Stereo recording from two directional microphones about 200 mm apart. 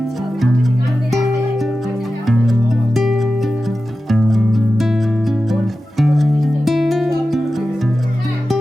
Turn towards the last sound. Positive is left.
turn(degrees=0)  # may be behind; listen again after turning